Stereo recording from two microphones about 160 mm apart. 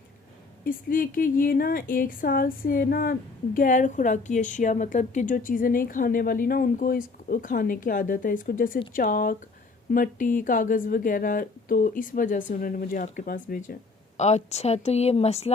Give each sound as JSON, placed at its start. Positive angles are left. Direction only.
{"t": 0.6, "sound": "a woman's voice", "side_deg": 60}
{"t": 14.2, "sound": "speech", "side_deg": 45}